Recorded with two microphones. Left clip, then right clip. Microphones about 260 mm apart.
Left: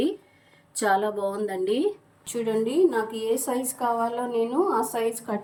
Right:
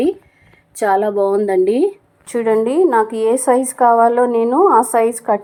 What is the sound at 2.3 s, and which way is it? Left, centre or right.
A woman's voice, right.